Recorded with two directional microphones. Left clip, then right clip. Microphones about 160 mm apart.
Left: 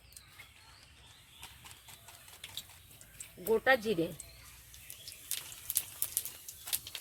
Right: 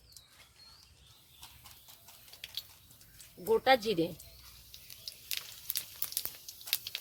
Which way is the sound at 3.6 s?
30° right (ahead or behind).